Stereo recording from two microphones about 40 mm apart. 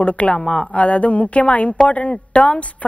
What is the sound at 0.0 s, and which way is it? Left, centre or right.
A woman's voice, left.